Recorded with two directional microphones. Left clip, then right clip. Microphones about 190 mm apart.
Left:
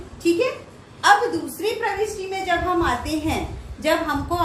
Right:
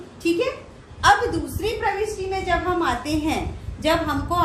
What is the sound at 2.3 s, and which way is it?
A woman's voice, 15° right (ahead or behind).